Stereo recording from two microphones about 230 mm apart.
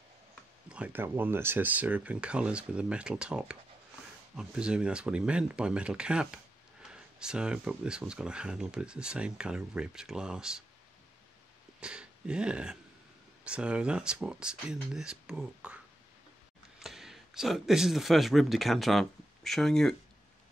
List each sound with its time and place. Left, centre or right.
0.7 s speech: centre
11.8 s speech: centre
16.8 s speech: centre